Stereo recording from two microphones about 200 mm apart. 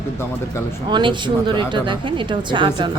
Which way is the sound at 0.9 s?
25° right (ahead or behind).